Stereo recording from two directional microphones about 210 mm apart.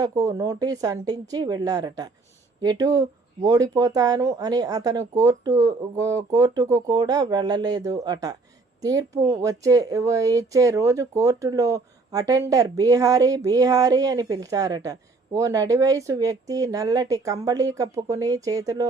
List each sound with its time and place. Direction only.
0.0 s speech: 15° right (ahead or behind)